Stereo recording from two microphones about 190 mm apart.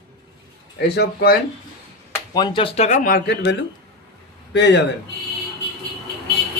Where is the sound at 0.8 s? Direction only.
55° left (ahead or behind).